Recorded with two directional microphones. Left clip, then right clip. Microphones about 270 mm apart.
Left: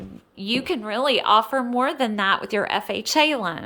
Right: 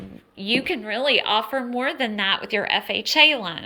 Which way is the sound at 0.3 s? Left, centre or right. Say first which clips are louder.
Right 2 dB; centre.